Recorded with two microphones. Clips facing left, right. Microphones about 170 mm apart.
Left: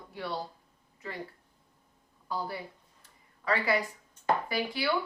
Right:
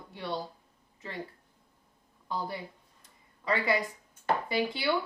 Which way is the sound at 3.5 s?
20° right (ahead or behind).